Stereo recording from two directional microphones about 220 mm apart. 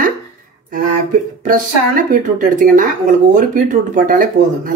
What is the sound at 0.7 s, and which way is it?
A man's voice, 40° right (ahead or behind).